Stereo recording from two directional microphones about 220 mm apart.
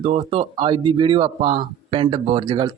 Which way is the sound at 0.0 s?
25° right (ahead or behind).